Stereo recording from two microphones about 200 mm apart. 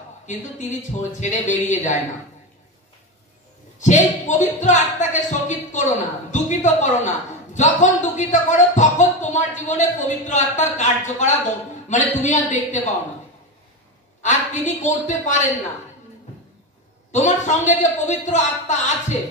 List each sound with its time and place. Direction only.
0.3 s speech: 35° left (ahead or behind)
3.8 s speech: 35° left (ahead or behind)
14.2 s a woman's voice: 40° left (ahead or behind)
17.1 s speech: 35° left (ahead or behind)